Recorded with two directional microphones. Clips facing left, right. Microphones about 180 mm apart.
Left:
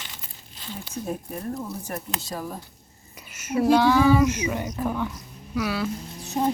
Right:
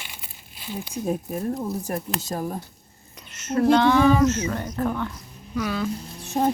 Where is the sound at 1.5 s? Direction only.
35° right (ahead or behind).